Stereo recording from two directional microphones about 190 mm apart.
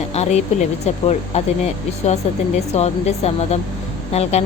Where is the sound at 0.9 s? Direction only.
35° left (ahead or behind).